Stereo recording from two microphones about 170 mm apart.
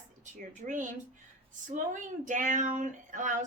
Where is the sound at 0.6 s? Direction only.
45° right (ahead or behind).